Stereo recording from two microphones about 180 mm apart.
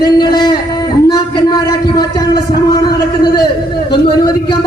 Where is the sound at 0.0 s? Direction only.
25° left (ahead or behind).